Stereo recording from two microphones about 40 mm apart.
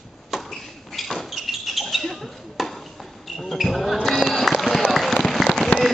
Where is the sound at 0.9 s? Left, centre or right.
Centre.